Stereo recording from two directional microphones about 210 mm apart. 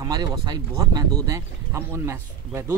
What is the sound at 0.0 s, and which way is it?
Speech, 20° right (ahead or behind).